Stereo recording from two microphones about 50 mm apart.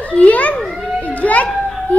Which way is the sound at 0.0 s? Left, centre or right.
Left.